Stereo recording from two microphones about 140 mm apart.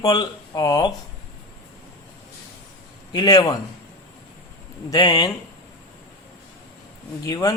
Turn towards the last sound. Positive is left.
turn(degrees=25)  # may be behind; listen again after turning